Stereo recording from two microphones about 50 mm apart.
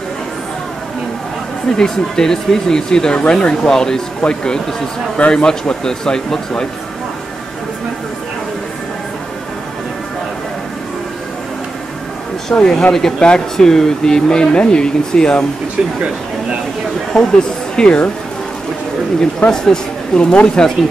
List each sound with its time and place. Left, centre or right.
1.8 s speech: centre
12.5 s speech: centre
17.1 s speech: centre
19.5 s speech: centre